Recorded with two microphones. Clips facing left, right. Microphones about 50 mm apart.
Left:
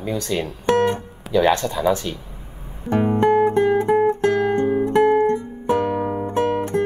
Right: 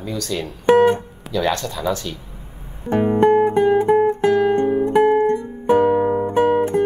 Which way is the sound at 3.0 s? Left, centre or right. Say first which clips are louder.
Right 2 dB; centre.